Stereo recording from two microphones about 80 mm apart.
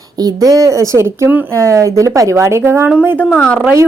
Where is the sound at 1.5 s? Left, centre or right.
Right.